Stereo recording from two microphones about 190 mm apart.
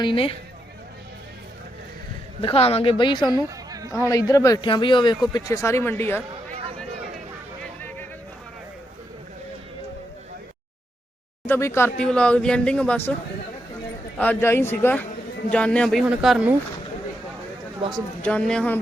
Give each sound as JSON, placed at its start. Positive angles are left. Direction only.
{"t": 0.0, "sound": "a man's voice", "side_deg": 30}
{"t": 2.4, "sound": "a man's voice", "side_deg": 30}
{"t": 3.2, "sound": "a sound", "side_deg": -20}
{"t": 4.1, "sound": "a man's voice", "side_deg": 15}
{"t": 7.8, "sound": "a sound", "side_deg": 10}
{"t": 11.4, "sound": "speech", "side_deg": 10}
{"t": 14.2, "sound": "speech", "side_deg": 10}
{"t": 17.8, "sound": "speech", "side_deg": -25}
{"t": 18.2, "sound": "speech", "side_deg": 5}